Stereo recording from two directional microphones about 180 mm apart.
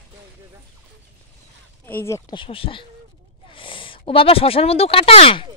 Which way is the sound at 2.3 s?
30° left (ahead or behind).